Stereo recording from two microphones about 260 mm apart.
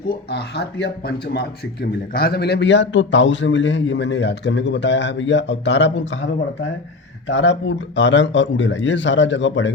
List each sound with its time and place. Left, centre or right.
0.3 s speech: left
7.3 s speech: left